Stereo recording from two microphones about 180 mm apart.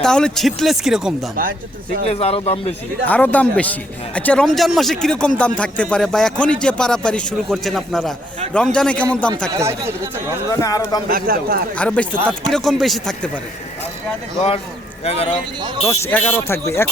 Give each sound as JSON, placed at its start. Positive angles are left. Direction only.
{"t": 0.0, "sound": "speech", "side_deg": 5}
{"t": 1.4, "sound": "speech", "side_deg": -50}
{"t": 2.0, "sound": "a man's voice", "side_deg": 35}
{"t": 3.1, "sound": "speech", "side_deg": 10}
{"t": 9.5, "sound": "speech", "side_deg": -15}
{"t": 10.5, "sound": "a man's voice", "side_deg": 20}
{"t": 11.1, "sound": "a man's voice", "side_deg": -55}
{"t": 11.8, "sound": "speech", "side_deg": 5}
{"t": 15.0, "sound": "a man's voice", "side_deg": 35}
{"t": 15.9, "sound": "speech", "side_deg": 10}